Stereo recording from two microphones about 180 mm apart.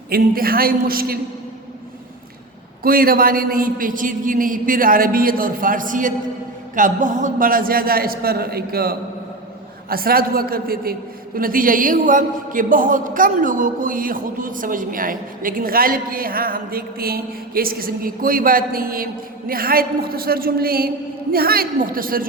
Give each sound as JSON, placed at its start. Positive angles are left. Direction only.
{"t": 0.1, "sound": "a man's voice", "side_deg": -55}
{"t": 2.8, "sound": "a man's voice", "side_deg": -55}